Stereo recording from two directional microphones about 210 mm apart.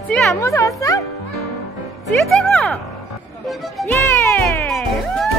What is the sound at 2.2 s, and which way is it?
Speech, 5° left (ahead or behind).